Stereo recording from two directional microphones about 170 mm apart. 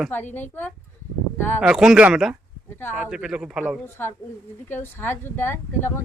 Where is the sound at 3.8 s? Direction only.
15° left (ahead or behind).